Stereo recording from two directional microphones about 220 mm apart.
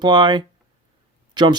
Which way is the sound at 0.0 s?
20° right (ahead or behind).